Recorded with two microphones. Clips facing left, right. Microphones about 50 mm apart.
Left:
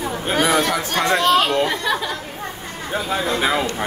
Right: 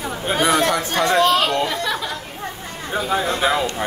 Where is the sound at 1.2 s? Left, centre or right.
Left.